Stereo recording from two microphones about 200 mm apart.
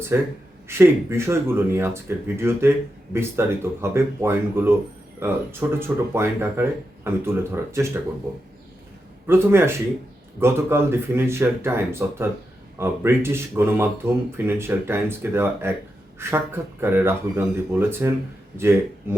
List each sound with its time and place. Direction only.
0.1 s speech: 10° right (ahead or behind)
9.2 s speech: 10° right (ahead or behind)